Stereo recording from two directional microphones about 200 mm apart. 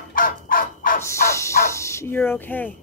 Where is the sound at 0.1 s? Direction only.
45° left (ahead or behind).